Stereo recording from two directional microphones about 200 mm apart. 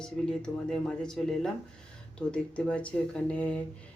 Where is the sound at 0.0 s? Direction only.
5° left (ahead or behind).